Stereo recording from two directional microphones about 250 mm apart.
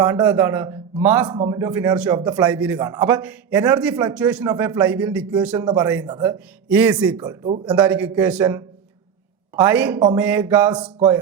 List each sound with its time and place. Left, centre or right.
0.0 s a man's voice: centre
5.9 s a man's voice: centre
7.3 s speech: right
7.8 s a man's voice: centre